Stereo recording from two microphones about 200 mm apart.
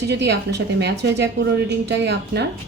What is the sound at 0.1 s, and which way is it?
Speech, 60° right (ahead or behind).